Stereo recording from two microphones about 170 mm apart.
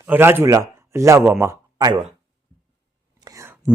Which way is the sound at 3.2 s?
20° right (ahead or behind).